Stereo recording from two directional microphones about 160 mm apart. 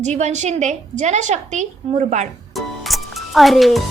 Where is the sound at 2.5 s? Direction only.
Centre (ahead or behind).